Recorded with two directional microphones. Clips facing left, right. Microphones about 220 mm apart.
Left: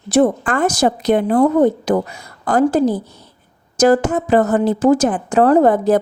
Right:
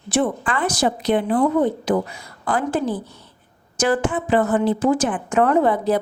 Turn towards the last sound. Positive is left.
turn(degrees=45)  # may be behind; listen again after turning